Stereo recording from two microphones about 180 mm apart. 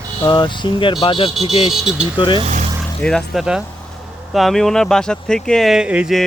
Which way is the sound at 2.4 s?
45° right (ahead or behind).